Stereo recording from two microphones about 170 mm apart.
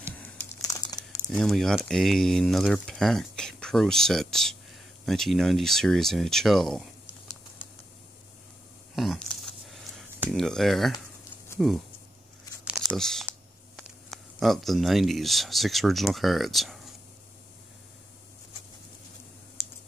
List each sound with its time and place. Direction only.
0.1 s computer keyboard: 10° left (ahead or behind)
0.6 s crumpling: 20° left (ahead or behind)
1.3 s speech: centre (ahead or behind)
8.9 s a sound: centre (ahead or behind)
10.3 s speech: centre (ahead or behind)
12.9 s speech: centre (ahead or behind)